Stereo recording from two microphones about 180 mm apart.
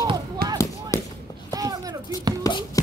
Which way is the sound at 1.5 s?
20° right (ahead or behind).